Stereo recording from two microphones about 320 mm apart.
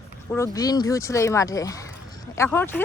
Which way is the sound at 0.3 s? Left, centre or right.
Centre.